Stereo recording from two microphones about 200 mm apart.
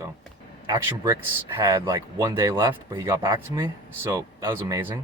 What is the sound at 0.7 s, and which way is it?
Speech, 15° right (ahead or behind).